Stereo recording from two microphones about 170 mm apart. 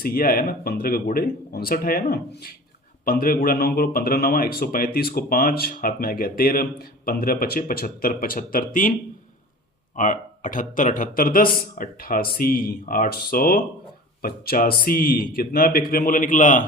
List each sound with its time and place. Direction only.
0.0 s speech: 60° left (ahead or behind)